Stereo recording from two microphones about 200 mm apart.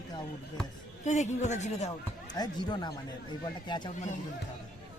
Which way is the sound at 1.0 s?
35° left (ahead or behind).